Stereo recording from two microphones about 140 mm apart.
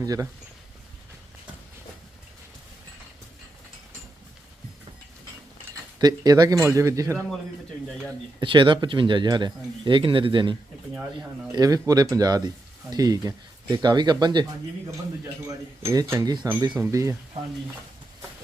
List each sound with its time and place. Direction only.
0.0 s speech: 25° right (ahead or behind)
6.0 s speech: 30° right (ahead or behind)
8.4 s speech: 35° right (ahead or behind)
10.9 s speech: 5° right (ahead or behind)
11.5 s speech: 25° right (ahead or behind)
15.4 s speech: 25° right (ahead or behind)